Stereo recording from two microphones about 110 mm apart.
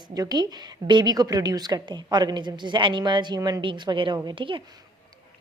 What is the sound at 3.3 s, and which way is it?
Speech, 30° right (ahead or behind).